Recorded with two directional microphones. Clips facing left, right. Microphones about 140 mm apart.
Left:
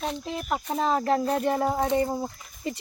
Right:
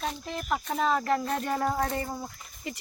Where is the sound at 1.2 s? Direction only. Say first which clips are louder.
Left 4 dB; 10° left (ahead or behind); by 2.8 s 30° left (ahead or behind).